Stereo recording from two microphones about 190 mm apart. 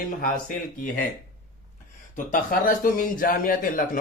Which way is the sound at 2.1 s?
45° left (ahead or behind).